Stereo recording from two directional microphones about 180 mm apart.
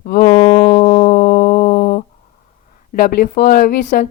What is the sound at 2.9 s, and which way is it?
Speech, 55° left (ahead or behind).